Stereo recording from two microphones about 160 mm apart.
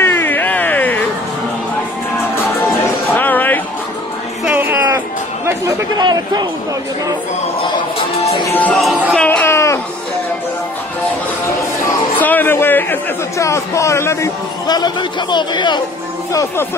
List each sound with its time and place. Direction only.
0.0 s a sound: 15° left (ahead or behind)
3.2 s music: 10° left (ahead or behind)
4.5 s chatter: 10° right (ahead or behind)
8.5 s music: 10° left (ahead or behind)
8.7 s speech: centre (ahead or behind); by 9.8 s 15° left (ahead or behind)
12.2 s a man's voice: 10° left (ahead or behind); by 15.8 s 30° left (ahead or behind)